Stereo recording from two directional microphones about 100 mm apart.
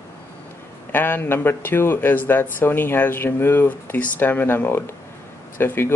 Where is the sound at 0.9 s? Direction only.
20° left (ahead or behind).